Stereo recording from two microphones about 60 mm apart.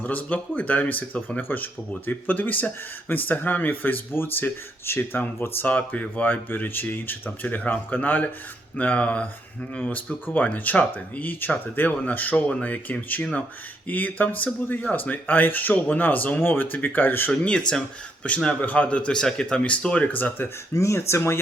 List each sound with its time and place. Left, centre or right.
0.0 s speech: left
17.4 s speech: centre; by 20.5 s left
20.7 s speech: left